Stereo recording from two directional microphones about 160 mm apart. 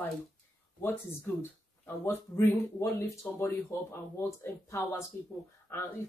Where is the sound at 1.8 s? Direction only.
15° left (ahead or behind).